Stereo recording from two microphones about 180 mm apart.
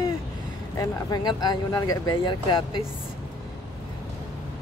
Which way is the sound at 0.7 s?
20° left (ahead or behind).